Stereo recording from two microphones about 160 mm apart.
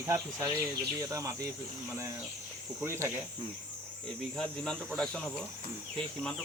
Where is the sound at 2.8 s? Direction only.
15° right (ahead or behind).